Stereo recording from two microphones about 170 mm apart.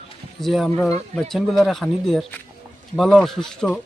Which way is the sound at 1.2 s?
Centre (ahead or behind).